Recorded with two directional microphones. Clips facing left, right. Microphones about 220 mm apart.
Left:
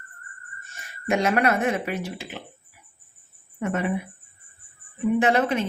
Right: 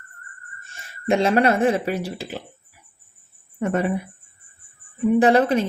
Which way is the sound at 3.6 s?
35° right (ahead or behind).